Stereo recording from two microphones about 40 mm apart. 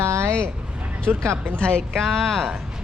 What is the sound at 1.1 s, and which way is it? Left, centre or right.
Speech, right.